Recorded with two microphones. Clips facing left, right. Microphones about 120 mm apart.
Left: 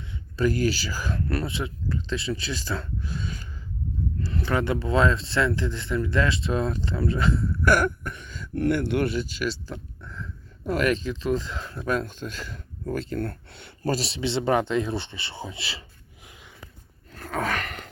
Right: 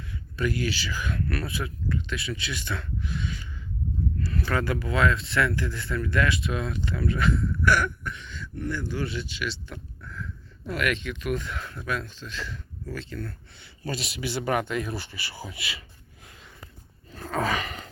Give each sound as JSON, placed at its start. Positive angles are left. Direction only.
{"t": 0.1, "sound": "speech", "side_deg": 30}
{"t": 4.2, "sound": "speech", "side_deg": 25}
{"t": 7.6, "sound": "a sound", "side_deg": 50}
{"t": 8.5, "sound": "speech", "side_deg": 65}
{"t": 9.1, "sound": "speech", "side_deg": 40}
{"t": 9.7, "sound": "a sound", "side_deg": 25}
{"t": 10.7, "sound": "speech", "side_deg": 35}
{"t": 11.9, "sound": "speech", "side_deg": 45}
{"t": 13.2, "sound": "speech", "side_deg": 60}
{"t": 13.9, "sound": "speech", "side_deg": 30}
{"t": 17.1, "sound": "gasp", "side_deg": 0}